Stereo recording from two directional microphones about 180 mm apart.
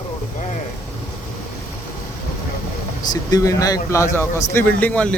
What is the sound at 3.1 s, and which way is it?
A man's voice, 20° left (ahead or behind).